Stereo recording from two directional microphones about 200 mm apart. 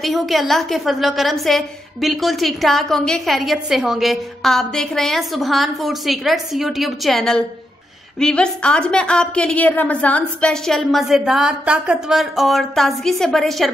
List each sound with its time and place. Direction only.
0.0 s a woman's voice: centre (ahead or behind)